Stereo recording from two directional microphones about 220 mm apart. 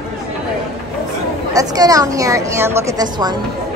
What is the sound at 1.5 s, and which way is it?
Speech, 15° right (ahead or behind).